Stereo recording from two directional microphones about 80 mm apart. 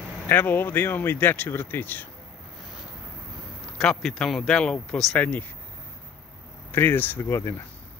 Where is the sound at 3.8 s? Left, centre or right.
Centre.